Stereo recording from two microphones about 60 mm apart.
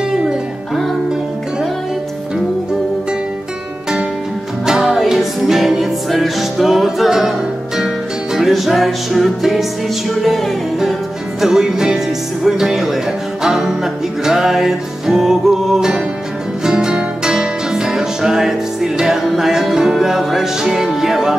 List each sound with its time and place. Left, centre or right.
4.6 s music: centre